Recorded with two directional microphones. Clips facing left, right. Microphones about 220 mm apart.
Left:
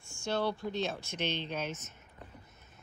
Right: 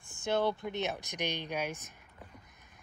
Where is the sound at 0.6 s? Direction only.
20° right (ahead or behind).